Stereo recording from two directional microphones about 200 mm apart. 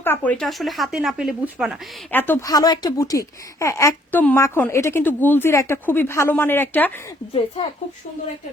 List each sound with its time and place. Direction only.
0.0 s speech: 10° left (ahead or behind)
2.0 s speech: 10° left (ahead or behind)
7.3 s speech: 30° left (ahead or behind)